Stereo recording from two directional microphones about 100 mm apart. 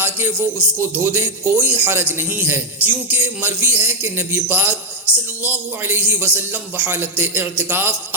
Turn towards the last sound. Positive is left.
turn(degrees=-20)  # may be behind; listen again after turning